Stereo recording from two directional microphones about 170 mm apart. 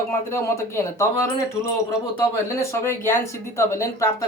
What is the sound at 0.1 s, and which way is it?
Speech, 15° left (ahead or behind).